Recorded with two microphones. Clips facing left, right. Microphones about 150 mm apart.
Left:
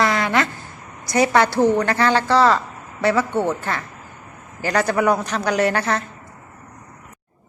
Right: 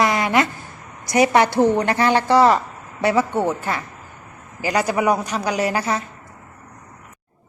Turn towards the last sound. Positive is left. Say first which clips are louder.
# left 2 dB
turn(degrees=-5)  # may be behind; listen again after turning